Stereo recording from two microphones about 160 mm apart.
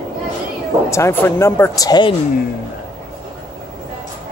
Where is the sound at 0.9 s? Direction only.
15° left (ahead or behind).